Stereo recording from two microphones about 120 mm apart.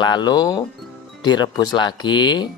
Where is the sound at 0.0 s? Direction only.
35° left (ahead or behind).